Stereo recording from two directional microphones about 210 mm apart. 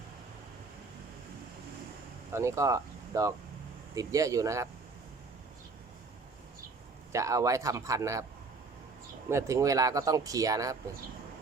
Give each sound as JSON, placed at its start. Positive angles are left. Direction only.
{"t": 2.3, "sound": "speech", "side_deg": -15}
{"t": 7.1, "sound": "speech", "side_deg": -15}
{"t": 9.3, "sound": "speech", "side_deg": -15}